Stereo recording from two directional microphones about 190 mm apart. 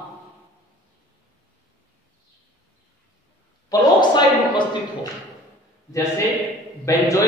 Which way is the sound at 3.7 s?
25° left (ahead or behind).